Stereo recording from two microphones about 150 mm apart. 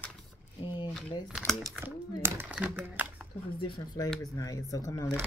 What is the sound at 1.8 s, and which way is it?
Speech, 15° right (ahead or behind).